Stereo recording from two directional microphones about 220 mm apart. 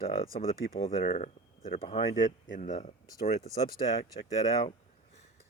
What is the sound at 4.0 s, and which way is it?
Speech, 20° left (ahead or behind).